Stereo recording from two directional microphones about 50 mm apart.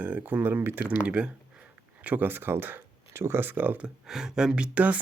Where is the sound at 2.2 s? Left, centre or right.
Right.